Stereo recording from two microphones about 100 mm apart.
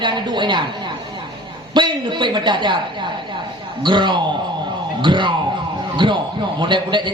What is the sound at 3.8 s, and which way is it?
A man's voice, 50° right (ahead or behind).